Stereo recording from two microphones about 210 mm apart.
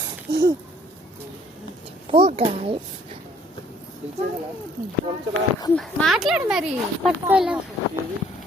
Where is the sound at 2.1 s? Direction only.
25° right (ahead or behind).